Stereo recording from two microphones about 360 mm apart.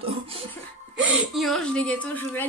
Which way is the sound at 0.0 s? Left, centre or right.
Centre.